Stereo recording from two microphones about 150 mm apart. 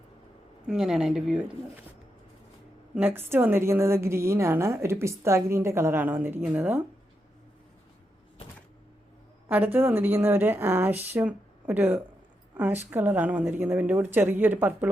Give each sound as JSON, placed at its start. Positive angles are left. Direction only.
{"t": 0.7, "sound": "speech", "side_deg": -5}
{"t": 2.9, "sound": "a woman's voice", "side_deg": -15}
{"t": 9.5, "sound": "a woman's voice", "side_deg": -15}